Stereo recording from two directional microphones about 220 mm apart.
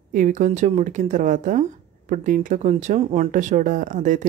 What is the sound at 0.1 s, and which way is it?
Speech, 35° right (ahead or behind).